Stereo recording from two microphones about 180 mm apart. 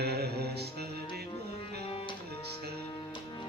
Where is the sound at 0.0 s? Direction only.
65° right (ahead or behind).